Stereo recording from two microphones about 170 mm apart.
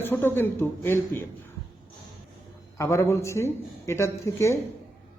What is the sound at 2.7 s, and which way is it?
Speech, 15° left (ahead or behind).